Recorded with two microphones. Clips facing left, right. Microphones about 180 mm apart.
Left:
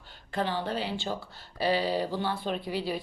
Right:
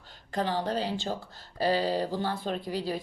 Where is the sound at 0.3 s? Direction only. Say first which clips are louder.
Right 1 dB; 40° right (ahead or behind).